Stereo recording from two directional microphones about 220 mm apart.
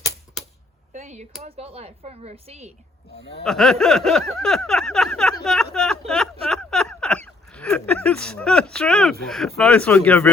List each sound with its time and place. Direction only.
0.9 s speech: 30° right (ahead or behind)
3.4 s speech: centre (ahead or behind)
5.7 s a sound: 5° left (ahead or behind)
9.2 s speech: centre (ahead or behind)